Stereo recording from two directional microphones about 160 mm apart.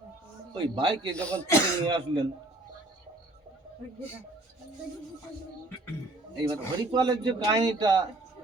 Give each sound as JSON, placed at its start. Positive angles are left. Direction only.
{"t": 0.5, "sound": "a man's voice", "side_deg": -25}
{"t": 1.1, "sound": "speech", "side_deg": 10}
{"t": 1.9, "sound": "speech", "side_deg": -30}
{"t": 6.3, "sound": "a man's voice", "side_deg": -25}